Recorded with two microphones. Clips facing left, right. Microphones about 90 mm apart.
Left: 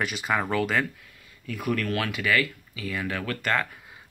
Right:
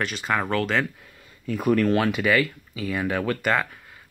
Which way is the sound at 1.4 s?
30° right (ahead or behind).